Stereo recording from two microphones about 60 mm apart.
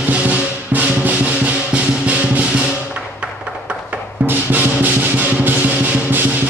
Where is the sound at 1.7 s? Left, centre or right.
Right.